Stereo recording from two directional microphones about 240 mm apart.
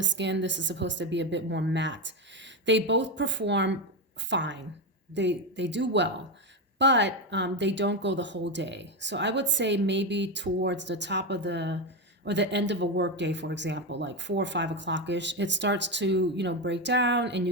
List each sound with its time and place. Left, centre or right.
0.0 s speech: right